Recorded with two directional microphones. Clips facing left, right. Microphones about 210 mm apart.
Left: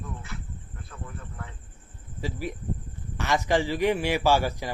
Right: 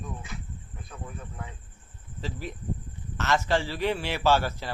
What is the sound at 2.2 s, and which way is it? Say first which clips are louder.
A man's voice: left 3 dB; 10° left (ahead or behind).